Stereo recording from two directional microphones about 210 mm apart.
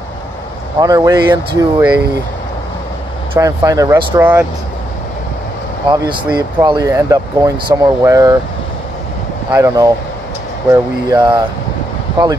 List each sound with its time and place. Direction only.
0.7 s speech: 15° right (ahead or behind)
3.3 s speech: 15° right (ahead or behind)
5.9 s speech: 20° right (ahead or behind)
9.5 s speech: 15° right (ahead or behind)